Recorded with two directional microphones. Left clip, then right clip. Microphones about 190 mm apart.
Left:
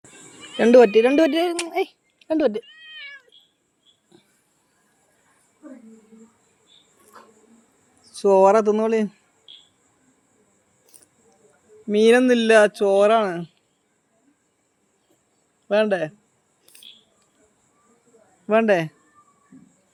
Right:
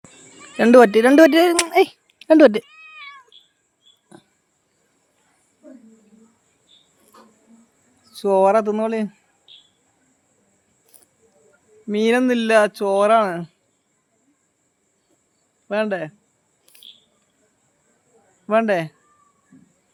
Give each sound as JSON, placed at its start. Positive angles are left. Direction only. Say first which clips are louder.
{"t": 0.6, "sound": "speech", "louder": "right 2 dB", "side_deg": -30}
{"t": 8.0, "sound": "speech", "louder": "left 1 dB", "side_deg": -5}
{"t": 10.8, "sound": "a sound", "louder": "left 1 dB", "side_deg": -5}
{"t": 11.9, "sound": "speech", "louder": "left 3 dB", "side_deg": -5}
{"t": 15.6, "sound": "speech", "louder": "left 3 dB", "side_deg": 0}
{"t": 18.4, "sound": "speech", "louder": "even", "side_deg": 0}